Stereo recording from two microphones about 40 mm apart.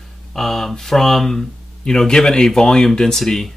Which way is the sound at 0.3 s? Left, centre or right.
Centre.